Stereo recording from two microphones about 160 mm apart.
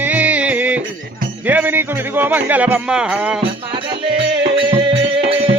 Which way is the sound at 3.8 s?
30° right (ahead or behind).